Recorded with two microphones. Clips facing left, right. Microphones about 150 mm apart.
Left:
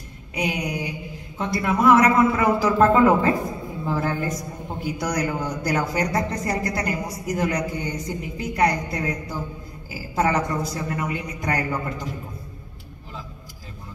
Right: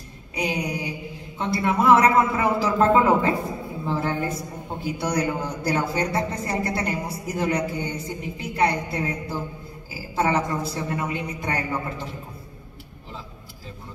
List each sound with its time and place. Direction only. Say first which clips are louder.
0.4 s a sound: even; 30° right (ahead or behind)
1.4 s a woman's voice: left 1 dB; 30° right (ahead or behind)
10.1 s a woman's voice: left 1 dB; 30° right (ahead or behind)